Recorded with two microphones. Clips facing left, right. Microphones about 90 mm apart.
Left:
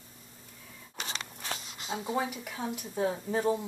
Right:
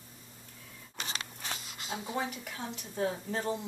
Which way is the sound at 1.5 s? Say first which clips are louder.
Left 3 dB; 30° left (ahead or behind).